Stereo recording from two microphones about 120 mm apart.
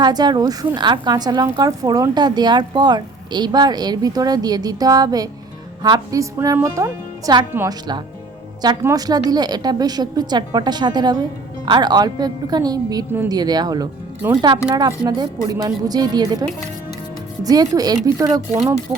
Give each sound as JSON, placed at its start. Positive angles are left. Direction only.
{"t": 0.0, "sound": "speech", "side_deg": -35}
{"t": 7.7, "sound": "speech", "side_deg": -35}
{"t": 14.2, "sound": "speech", "side_deg": -20}
{"t": 14.8, "sound": "speech", "side_deg": -35}